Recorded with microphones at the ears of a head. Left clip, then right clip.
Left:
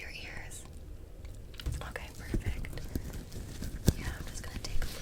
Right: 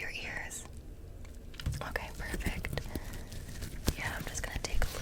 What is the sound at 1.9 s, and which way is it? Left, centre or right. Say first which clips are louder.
Whispering: right 3 dB; right.